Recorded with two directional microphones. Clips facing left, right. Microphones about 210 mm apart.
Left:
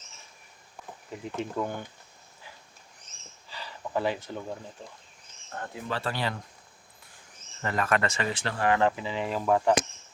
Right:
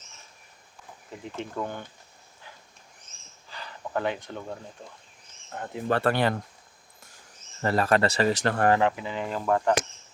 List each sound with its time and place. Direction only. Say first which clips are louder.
1.4 s speech: left 2 dB; centre (ahead or behind)
3.5 s a sound: even; 5° left (ahead or behind)
5.5 s speech: right 3 dB; 15° right (ahead or behind)
5.9 s speech: right 8 dB; 60° right (ahead or behind)
7.6 s speech: right 4 dB; 35° right (ahead or behind)
8.8 s speech: even; centre (ahead or behind)